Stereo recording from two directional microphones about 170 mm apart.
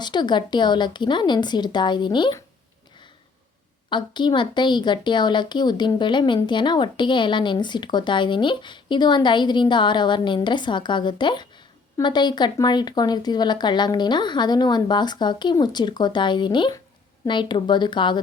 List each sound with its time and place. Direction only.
0.0 s a woman's voice: 25° left (ahead or behind)
3.8 s a woman's voice: 25° left (ahead or behind)